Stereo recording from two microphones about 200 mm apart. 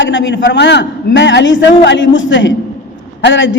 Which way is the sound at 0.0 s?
65° left (ahead or behind).